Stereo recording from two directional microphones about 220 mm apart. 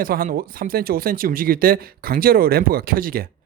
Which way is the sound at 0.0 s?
40° right (ahead or behind).